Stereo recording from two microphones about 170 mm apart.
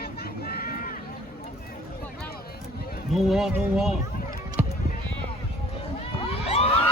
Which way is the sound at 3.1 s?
Centre (ahead or behind).